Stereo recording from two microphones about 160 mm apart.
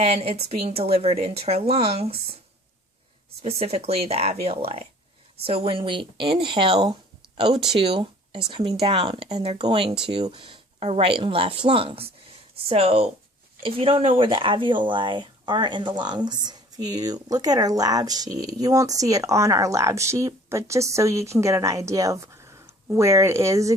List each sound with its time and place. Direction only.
0.0 s speech: 40° right (ahead or behind)
3.4 s speech: 40° right (ahead or behind); by 23.7 s 20° right (ahead or behind)